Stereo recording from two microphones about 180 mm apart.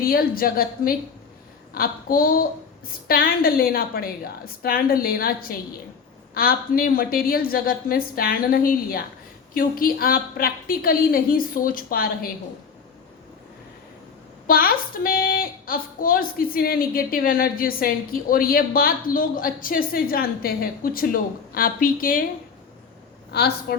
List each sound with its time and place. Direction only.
0.0 s a woman's voice: 55° left (ahead or behind)
14.4 s a woman's voice: 55° left (ahead or behind)
23.3 s a woman's voice: 65° left (ahead or behind)